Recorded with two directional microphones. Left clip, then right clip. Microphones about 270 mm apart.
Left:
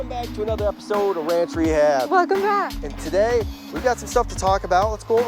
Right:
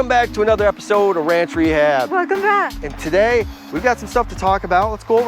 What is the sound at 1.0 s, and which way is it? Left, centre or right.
Music, right.